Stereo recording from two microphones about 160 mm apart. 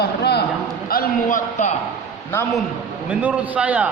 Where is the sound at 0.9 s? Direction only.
65° left (ahead or behind).